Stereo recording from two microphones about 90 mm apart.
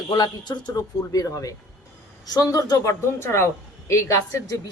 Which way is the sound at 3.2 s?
30° left (ahead or behind).